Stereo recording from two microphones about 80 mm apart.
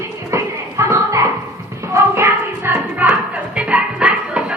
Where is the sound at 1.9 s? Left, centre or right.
Right.